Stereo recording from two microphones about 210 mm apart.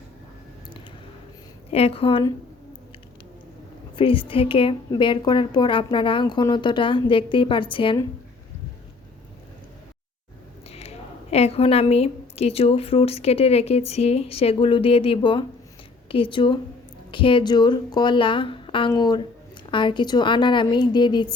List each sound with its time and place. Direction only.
1.7 s a woman's voice: 30° left (ahead or behind)
3.9 s a woman's voice: 25° left (ahead or behind)
10.7 s a woman's voice: 30° left (ahead or behind)